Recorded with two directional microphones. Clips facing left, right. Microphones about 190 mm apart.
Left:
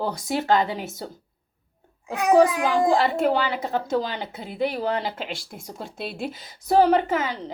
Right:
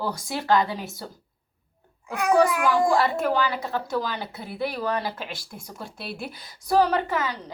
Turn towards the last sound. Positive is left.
turn(degrees=20)  # may be behind; listen again after turning